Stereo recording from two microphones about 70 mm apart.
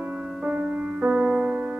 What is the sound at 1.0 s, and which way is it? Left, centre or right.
Music, centre.